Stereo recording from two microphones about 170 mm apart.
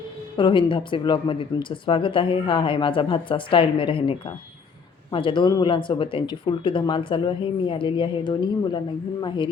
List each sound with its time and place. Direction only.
0.3 s speech: 30° left (ahead or behind)